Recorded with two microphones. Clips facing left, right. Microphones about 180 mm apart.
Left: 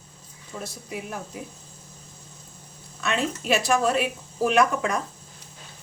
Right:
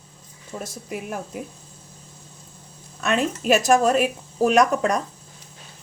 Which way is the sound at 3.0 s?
50° right (ahead or behind).